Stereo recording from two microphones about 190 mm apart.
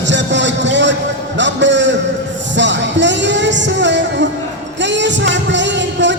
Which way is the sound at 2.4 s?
70° right (ahead or behind).